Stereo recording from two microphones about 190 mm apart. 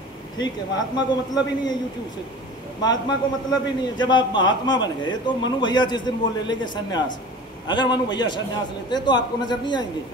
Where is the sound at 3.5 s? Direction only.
25° left (ahead or behind).